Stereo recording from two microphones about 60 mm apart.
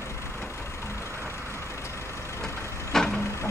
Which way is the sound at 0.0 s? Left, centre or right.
Left.